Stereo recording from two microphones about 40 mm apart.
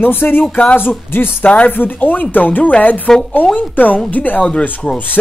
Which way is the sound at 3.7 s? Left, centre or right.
Left.